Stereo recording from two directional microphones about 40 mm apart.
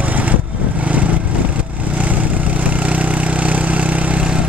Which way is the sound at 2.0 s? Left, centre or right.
Right.